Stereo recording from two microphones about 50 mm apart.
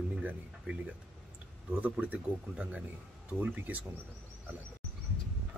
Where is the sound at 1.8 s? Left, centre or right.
Right.